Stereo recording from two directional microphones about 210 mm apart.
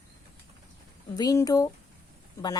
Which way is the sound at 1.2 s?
15° left (ahead or behind).